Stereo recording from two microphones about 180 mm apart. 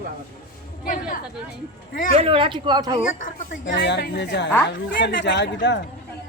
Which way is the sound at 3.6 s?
80° left.